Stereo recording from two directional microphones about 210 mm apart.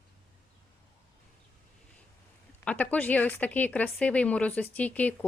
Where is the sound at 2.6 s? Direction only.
5° left (ahead or behind).